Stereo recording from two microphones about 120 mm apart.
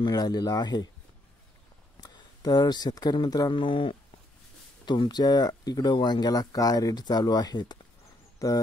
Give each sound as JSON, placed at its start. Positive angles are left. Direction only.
{"t": 0.0, "sound": "speech", "side_deg": 35}
{"t": 2.0, "sound": "speech", "side_deg": 35}